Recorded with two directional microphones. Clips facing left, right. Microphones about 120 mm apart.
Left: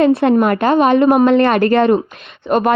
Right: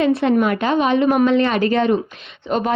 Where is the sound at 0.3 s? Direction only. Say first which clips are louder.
Left 4 dB; 45° left (ahead or behind).